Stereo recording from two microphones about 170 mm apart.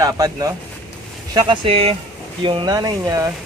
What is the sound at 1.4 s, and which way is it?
Speech, 30° right (ahead or behind).